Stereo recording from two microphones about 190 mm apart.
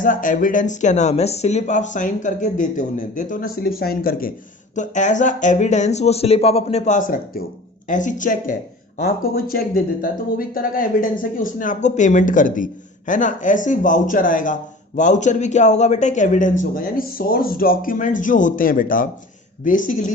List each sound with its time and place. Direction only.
0.0 s speech: 45° left (ahead or behind)
4.7 s speech: 40° left (ahead or behind)